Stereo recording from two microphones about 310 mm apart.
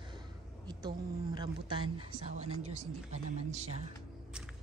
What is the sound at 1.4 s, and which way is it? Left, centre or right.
Speech, centre.